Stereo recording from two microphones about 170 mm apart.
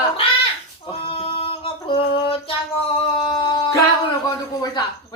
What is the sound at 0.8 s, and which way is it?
Female singing, 35° left (ahead or behind).